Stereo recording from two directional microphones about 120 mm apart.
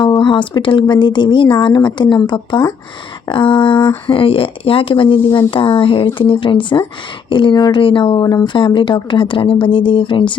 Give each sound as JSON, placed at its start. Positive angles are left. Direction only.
{"t": 0.0, "sound": "speech", "side_deg": 40}